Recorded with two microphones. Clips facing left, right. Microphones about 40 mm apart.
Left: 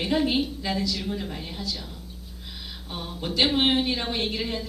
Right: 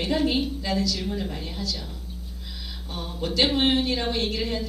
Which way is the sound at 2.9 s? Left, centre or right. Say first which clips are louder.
Even; centre.